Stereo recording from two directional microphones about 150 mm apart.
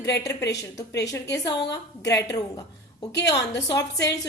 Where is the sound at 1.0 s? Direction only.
20° left (ahead or behind).